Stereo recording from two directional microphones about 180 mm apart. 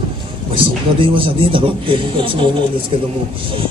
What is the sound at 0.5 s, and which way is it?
Mantra, 30° right (ahead or behind).